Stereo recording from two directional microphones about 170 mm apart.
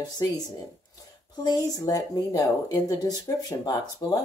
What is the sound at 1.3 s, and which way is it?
Speech, 20° left (ahead or behind).